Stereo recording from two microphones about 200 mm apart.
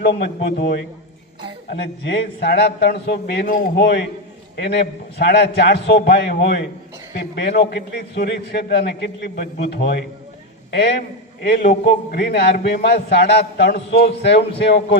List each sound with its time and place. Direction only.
0.2 s a man's voice: 50° left (ahead or behind)
2.0 s a man's voice: 55° left (ahead or behind)
5.1 s a man's voice: 55° left (ahead or behind)
11.4 s a man's voice: 50° left (ahead or behind)